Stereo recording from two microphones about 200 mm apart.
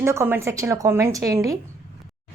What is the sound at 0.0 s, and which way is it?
A woman's voice, 15° right (ahead or behind).